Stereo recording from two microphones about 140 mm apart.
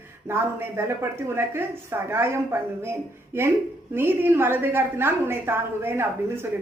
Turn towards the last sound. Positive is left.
turn(degrees=-15)  # may be behind; listen again after turning